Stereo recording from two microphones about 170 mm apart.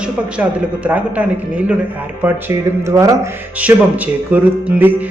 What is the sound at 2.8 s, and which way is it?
Speech, 15° right (ahead or behind).